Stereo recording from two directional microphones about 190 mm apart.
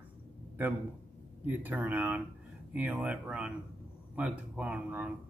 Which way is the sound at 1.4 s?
10° right (ahead or behind).